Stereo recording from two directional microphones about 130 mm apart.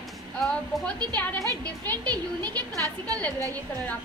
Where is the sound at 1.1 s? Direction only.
15° left (ahead or behind).